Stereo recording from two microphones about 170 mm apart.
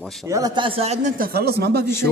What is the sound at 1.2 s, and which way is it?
Speech, 65° right (ahead or behind).